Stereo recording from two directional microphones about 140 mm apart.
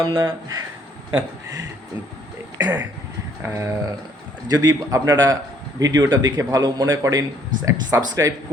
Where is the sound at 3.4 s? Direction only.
20° right (ahead or behind).